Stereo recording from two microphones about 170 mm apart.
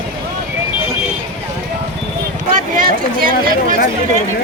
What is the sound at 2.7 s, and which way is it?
Chatter, 55° right (ahead or behind).